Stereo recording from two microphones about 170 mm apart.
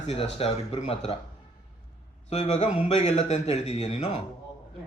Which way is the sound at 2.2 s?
40° left (ahead or behind).